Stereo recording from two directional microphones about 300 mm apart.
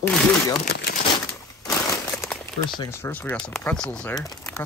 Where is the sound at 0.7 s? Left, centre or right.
Left.